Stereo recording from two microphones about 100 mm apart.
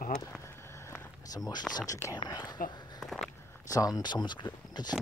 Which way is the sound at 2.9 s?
Centre (ahead or behind).